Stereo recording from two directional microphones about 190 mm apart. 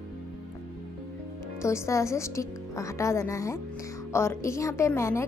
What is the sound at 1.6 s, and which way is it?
A woman's voice, 15° left (ahead or behind).